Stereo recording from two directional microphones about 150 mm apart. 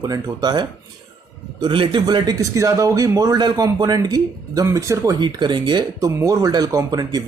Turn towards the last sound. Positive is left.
turn(degrees=-25)  # may be behind; listen again after turning